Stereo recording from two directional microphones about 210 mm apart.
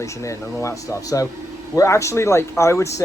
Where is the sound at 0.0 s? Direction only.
15° left (ahead or behind).